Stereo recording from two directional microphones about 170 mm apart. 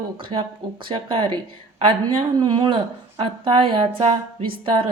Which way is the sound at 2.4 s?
25° right (ahead or behind).